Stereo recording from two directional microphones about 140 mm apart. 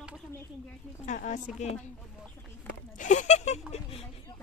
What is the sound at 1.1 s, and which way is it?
Speech, 65° left (ahead or behind).